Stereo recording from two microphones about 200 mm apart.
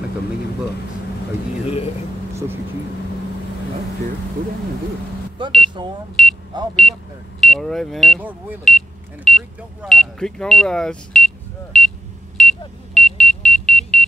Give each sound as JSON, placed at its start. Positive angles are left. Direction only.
{"t": 5.4, "sound": "speech", "side_deg": -25}
{"t": 6.2, "sound": "speech", "side_deg": 0}
{"t": 12.4, "sound": "smoke detector", "side_deg": 0}